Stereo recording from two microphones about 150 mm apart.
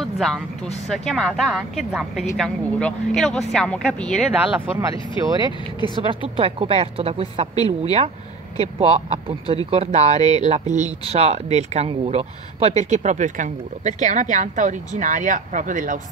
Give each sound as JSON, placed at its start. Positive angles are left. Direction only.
{"t": 0.0, "sound": "vehicle", "side_deg": 0}
{"t": 0.8, "sound": "speech", "side_deg": 0}
{"t": 4.3, "sound": "speech", "side_deg": -10}
{"t": 6.0, "sound": "speech", "side_deg": -35}
{"t": 7.5, "sound": "speech", "side_deg": 25}
{"t": 8.7, "sound": "speech", "side_deg": -40}